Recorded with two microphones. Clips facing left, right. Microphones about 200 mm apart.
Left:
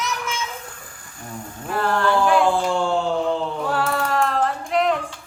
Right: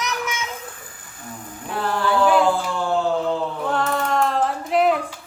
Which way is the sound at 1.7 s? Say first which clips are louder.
Left 2 dB; centre (ahead or behind).